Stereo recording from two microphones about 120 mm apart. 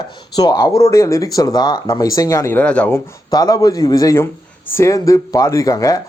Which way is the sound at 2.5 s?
10° left (ahead or behind).